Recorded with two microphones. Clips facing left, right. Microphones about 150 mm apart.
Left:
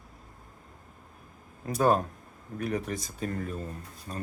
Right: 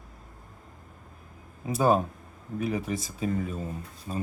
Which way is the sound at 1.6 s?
5° right (ahead or behind).